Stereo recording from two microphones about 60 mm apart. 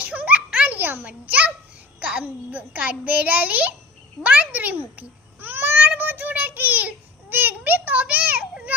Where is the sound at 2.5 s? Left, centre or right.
Right.